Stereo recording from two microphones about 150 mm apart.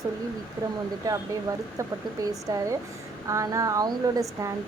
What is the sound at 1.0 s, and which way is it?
Speech, 20° right (ahead or behind).